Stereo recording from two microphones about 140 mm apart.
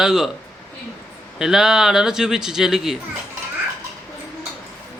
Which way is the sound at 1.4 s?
5° right (ahead or behind).